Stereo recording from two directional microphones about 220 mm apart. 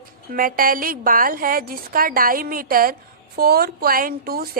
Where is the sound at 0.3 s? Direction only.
40° right (ahead or behind).